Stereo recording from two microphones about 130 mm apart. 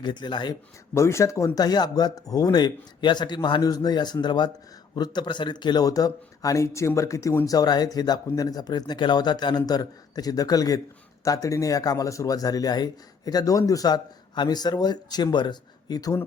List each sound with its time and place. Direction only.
0.0 s speech: 35° left (ahead or behind)
0.9 s speech: 20° left (ahead or behind)